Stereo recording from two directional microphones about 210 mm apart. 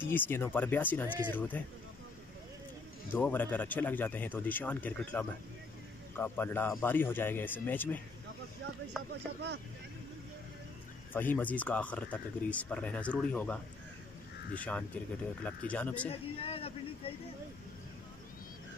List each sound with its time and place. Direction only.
0.0 s speech: 10° left (ahead or behind)
3.1 s speech: 10° left (ahead or behind)
11.1 s speech: 10° left (ahead or behind)
16.1 s speech: 25° left (ahead or behind)